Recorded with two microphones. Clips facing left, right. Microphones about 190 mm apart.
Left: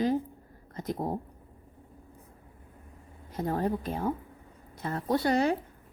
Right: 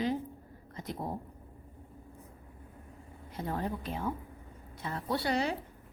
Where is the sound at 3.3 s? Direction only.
40° left (ahead or behind).